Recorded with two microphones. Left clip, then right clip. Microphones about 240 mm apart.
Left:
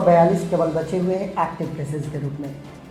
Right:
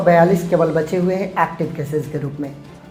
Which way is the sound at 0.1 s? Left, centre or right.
Right.